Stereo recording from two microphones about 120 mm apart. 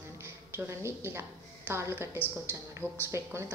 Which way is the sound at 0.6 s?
20° right (ahead or behind).